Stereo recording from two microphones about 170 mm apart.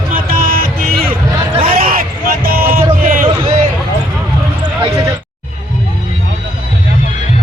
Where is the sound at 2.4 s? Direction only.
60° right (ahead or behind).